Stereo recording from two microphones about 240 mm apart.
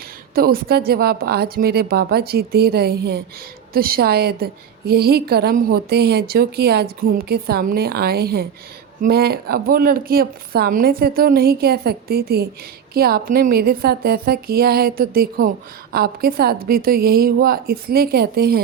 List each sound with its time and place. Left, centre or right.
0.3 s a woman's voice: right